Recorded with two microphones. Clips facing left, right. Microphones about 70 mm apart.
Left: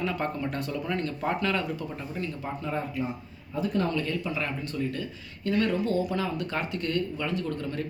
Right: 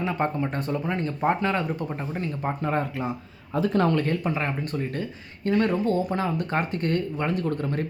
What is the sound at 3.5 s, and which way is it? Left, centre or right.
Speech, right.